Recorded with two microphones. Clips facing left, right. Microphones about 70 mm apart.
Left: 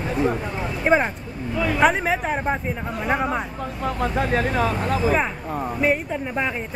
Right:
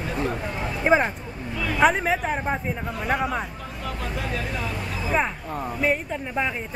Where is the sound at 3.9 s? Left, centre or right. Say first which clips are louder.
Left 8 dB; left.